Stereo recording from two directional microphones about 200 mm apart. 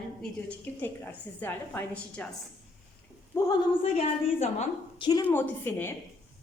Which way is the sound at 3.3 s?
15° left (ahead or behind).